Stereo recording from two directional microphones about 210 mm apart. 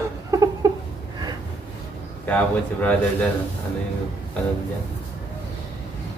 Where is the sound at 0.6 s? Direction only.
20° right (ahead or behind).